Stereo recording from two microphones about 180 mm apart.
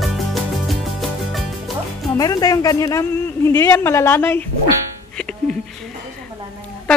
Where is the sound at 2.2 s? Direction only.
20° left (ahead or behind).